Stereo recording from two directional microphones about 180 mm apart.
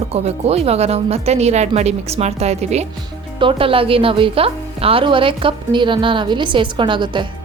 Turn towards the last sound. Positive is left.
turn(degrees=-25)  # may be behind; listen again after turning